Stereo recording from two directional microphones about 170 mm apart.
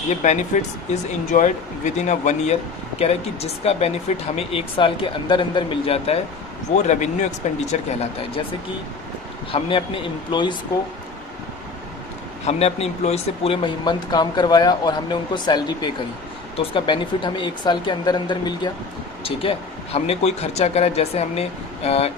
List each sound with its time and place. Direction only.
0.1 s speech: 45° left (ahead or behind)
9.5 s speech: 30° left (ahead or behind)
12.5 s speech: 40° left (ahead or behind)